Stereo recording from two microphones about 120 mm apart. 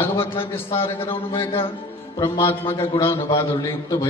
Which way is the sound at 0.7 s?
20° left (ahead or behind).